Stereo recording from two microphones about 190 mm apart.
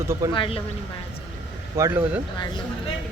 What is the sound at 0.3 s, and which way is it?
Speech, 30° left (ahead or behind).